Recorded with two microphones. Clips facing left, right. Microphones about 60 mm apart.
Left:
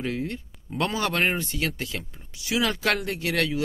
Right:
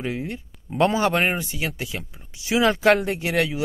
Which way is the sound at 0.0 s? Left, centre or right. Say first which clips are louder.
Right 1 dB; centre.